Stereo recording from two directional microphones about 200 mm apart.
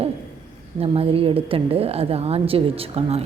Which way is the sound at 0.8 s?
30° right (ahead or behind).